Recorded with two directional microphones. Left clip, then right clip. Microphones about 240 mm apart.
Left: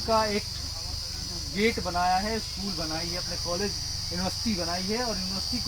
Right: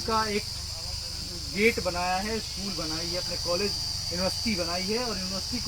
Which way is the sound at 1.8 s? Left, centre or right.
Centre.